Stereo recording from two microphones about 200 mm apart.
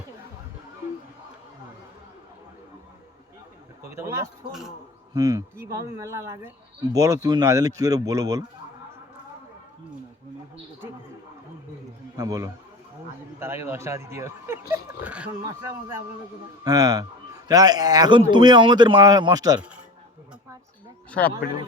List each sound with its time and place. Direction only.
3.8 s speech: 15° right (ahead or behind)
12.1 s speech: 15° right (ahead or behind)
16.6 s speech: 20° right (ahead or behind)
21.1 s speech: 5° left (ahead or behind)